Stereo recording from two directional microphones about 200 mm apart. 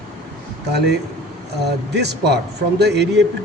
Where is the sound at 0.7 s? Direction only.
55° right (ahead or behind).